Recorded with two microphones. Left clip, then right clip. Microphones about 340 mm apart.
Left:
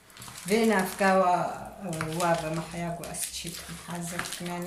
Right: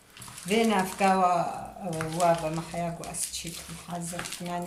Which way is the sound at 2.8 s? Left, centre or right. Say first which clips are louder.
Right 7 dB; centre.